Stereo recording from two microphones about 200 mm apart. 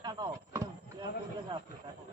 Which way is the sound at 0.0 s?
20° right (ahead or behind).